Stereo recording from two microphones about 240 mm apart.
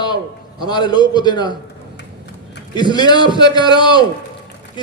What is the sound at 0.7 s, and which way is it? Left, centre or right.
Speech, centre.